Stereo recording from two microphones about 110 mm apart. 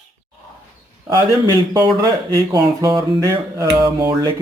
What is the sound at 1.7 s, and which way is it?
Speech, 40° right (ahead or behind).